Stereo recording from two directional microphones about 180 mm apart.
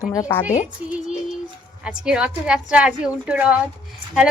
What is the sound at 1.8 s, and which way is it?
A woman's voice, 5° right (ahead or behind).